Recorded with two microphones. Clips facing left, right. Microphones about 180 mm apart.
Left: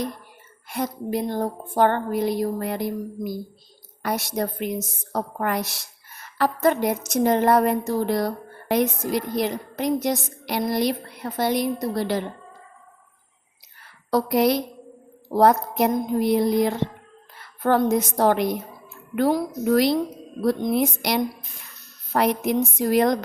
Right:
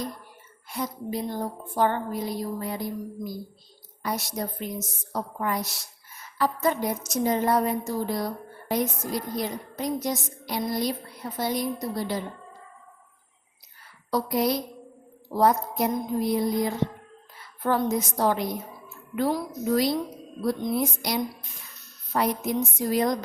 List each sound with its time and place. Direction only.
0.7 s a woman's voice: 65° left (ahead or behind)
13.8 s a sound: 70° left (ahead or behind)
15.3 s a woman's voice: 65° left (ahead or behind)
19.6 s a woman's voice: 70° left (ahead or behind)